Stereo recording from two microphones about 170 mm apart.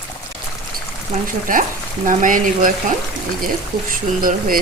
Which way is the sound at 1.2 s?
55° right (ahead or behind).